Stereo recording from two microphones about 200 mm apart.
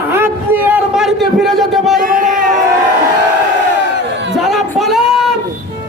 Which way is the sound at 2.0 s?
45° right (ahead or behind).